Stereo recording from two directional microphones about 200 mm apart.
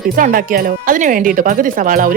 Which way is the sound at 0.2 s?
45° right (ahead or behind).